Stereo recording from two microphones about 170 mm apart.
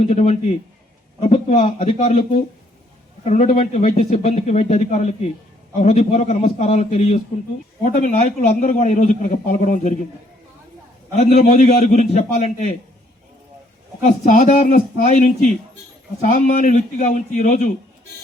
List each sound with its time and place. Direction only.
0.0 s a man's voice: 40° left (ahead or behind)
7.9 s a man's voice: 55° left (ahead or behind)
11.1 s a man's voice: 40° left (ahead or behind)
14.1 s a man's voice: 50° left (ahead or behind)